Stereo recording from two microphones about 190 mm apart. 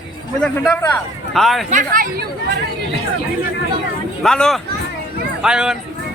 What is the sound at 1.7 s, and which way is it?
Speech, 45° right (ahead or behind).